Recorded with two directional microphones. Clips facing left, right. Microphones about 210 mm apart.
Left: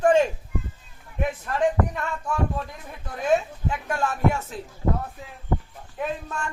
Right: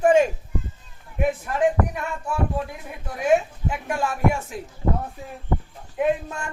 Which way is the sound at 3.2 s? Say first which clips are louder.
Right 2 dB; 10° right (ahead or behind).